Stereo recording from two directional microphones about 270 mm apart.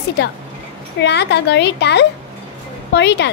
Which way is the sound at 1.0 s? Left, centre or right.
Left.